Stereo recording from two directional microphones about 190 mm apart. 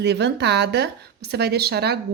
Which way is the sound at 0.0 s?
60° right (ahead or behind).